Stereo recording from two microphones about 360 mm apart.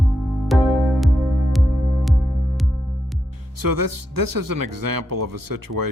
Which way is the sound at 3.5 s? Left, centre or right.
Right.